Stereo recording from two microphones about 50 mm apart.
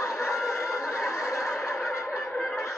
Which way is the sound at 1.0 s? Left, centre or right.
Left.